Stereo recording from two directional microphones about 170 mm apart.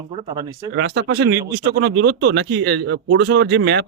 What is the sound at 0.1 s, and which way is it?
Speech, 30° right (ahead or behind).